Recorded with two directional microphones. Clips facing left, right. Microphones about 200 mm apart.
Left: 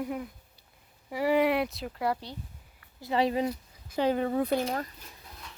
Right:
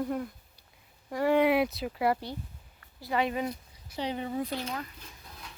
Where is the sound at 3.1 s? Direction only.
30° left (ahead or behind).